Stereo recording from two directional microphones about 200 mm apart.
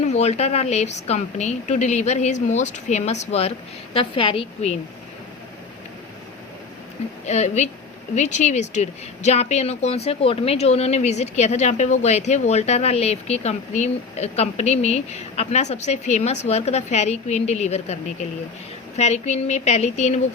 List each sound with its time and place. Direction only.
0.1 s a woman's voice: 35° left (ahead or behind)
7.3 s speech: 35° left (ahead or behind)
18.9 s speech: 35° left (ahead or behind)